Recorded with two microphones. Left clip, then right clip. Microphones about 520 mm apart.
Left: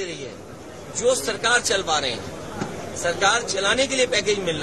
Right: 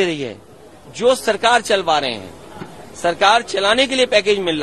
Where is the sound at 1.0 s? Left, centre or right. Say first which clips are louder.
Right 6 dB; right.